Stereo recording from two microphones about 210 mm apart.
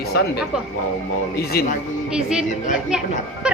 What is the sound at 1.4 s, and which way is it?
Speech, 45° left (ahead or behind).